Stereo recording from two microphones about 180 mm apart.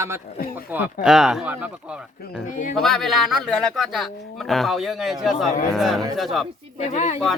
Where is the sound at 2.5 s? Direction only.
45° left (ahead or behind).